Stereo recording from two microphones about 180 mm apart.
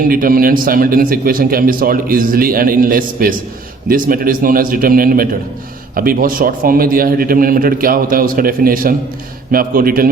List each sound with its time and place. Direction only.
0.1 s a man's voice: 55° right (ahead or behind)